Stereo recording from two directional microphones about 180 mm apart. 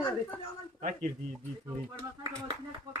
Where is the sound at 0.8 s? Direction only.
45° right (ahead or behind).